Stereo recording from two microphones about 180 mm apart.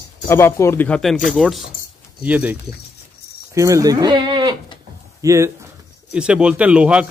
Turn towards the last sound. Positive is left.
turn(degrees=-5)  # may be behind; listen again after turning